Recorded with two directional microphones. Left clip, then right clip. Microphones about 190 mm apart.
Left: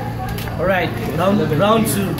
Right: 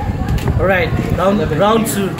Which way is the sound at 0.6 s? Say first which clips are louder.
Right 3 dB; 45° right (ahead or behind).